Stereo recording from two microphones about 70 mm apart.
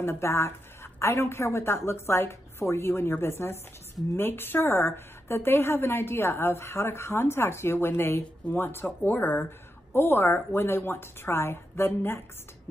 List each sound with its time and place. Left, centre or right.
0.0 s a woman's voice: left